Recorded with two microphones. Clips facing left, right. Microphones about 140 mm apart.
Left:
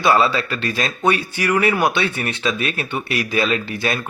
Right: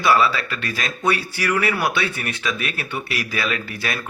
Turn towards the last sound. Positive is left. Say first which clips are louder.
# left 5 dB
turn(degrees=25)  # may be behind; listen again after turning